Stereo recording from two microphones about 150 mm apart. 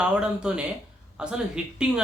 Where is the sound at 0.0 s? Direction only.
5° right (ahead or behind).